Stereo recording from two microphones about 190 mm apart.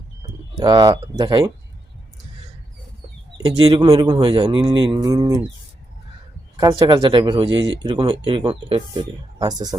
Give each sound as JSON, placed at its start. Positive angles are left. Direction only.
{"t": 0.2, "sound": "speech", "side_deg": -20}
{"t": 3.3, "sound": "speech", "side_deg": -25}
{"t": 6.6, "sound": "speech", "side_deg": -20}